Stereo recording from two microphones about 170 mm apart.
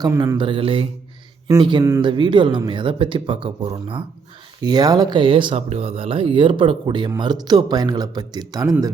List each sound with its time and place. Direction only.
0.0 s speech: 20° right (ahead or behind)
4.6 s speech: 25° right (ahead or behind)